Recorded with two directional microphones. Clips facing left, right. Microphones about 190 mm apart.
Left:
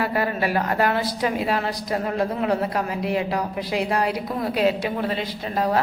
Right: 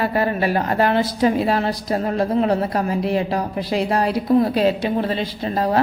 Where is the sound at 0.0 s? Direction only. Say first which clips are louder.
Right 3 dB; 30° right (ahead or behind).